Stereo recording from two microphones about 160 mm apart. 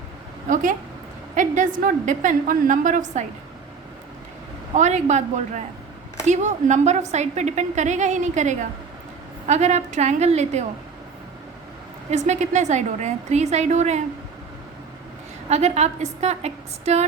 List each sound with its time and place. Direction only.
0.5 s a woman's voice: 55° right (ahead or behind)
4.7 s a woman's voice: 50° right (ahead or behind)
12.1 s a woman's voice: 45° right (ahead or behind)
15.4 s a woman's voice: 45° right (ahead or behind)